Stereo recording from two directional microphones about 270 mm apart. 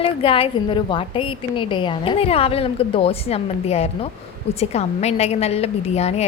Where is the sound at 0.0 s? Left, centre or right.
Centre.